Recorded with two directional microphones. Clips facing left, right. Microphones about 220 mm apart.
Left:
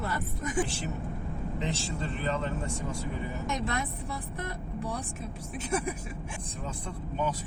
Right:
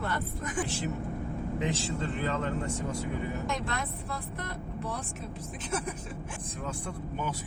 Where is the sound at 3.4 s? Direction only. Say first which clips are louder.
Left 1 dB; 20° left (ahead or behind).